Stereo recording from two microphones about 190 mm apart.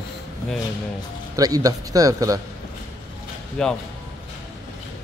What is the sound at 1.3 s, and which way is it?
A man's voice, 20° right (ahead or behind).